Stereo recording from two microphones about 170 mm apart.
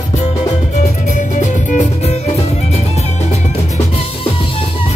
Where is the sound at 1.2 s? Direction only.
45° left (ahead or behind).